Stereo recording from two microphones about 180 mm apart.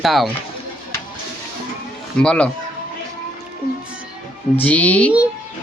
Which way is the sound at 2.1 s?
5° left (ahead or behind).